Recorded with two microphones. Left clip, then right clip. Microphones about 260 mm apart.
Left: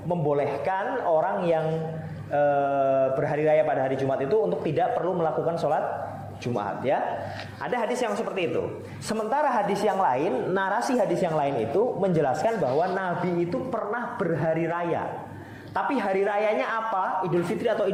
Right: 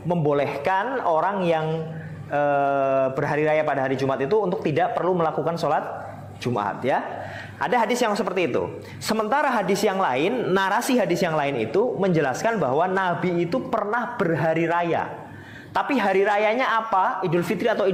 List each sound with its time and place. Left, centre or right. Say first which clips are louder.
0.1 s a man's voice: right 3 dB; right